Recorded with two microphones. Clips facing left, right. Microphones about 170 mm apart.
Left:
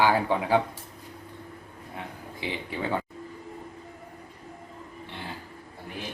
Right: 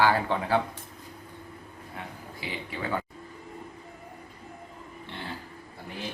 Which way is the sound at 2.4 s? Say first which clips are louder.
Left 3 dB; 25° left (ahead or behind).